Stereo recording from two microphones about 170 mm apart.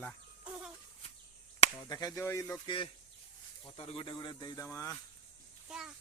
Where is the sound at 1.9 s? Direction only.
20° left (ahead or behind).